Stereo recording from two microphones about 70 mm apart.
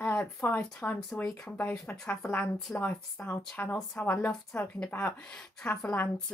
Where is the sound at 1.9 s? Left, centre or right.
Centre.